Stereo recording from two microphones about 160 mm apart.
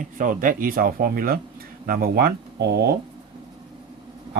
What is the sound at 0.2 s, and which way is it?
Speech, 55° right (ahead or behind).